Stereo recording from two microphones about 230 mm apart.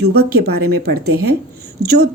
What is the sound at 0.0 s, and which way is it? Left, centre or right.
Speech, right.